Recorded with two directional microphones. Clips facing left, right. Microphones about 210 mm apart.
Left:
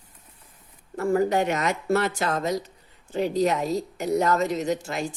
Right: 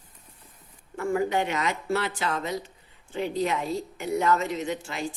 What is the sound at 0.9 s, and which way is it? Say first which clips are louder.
A woman's voice: left 4 dB; 40° left (ahead or behind).